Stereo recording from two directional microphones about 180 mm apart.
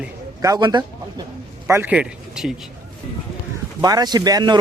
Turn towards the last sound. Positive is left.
turn(degrees=-20)  # may be behind; listen again after turning